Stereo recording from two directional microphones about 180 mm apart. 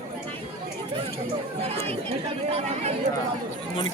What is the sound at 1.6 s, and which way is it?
Speech, 35° right (ahead or behind).